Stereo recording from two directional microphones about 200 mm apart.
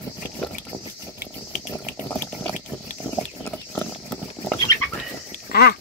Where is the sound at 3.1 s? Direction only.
10° left (ahead or behind).